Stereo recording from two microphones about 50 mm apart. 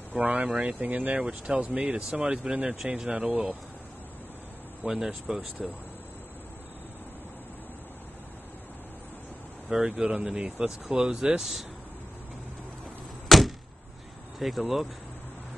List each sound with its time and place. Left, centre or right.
0.1 s speech: right
1.8 s speech: centre
4.8 s speech: centre
9.7 s speech: centre
13.3 s a sound: centre
14.4 s speech: centre